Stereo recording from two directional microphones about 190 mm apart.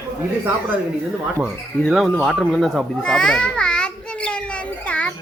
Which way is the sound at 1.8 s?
Centre (ahead or behind).